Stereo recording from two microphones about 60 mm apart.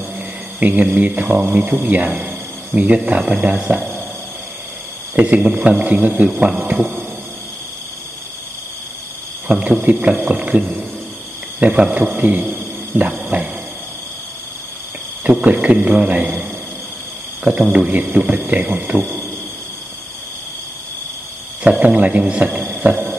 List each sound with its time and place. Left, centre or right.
0.6 s speech: right
5.1 s speech: right
9.5 s speech: right
11.6 s speech: right
13.3 s a sound: right
15.4 s speech: right
21.6 s speech: right